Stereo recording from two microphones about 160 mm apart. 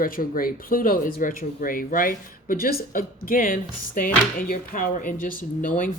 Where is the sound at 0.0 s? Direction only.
60° left (ahead or behind).